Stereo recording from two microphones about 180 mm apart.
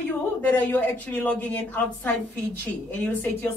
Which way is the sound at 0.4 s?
10° left (ahead or behind).